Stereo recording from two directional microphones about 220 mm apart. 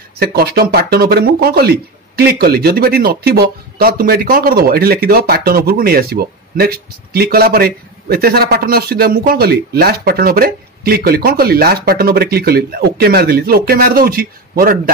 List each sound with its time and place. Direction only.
0.2 s speech: 45° right (ahead or behind)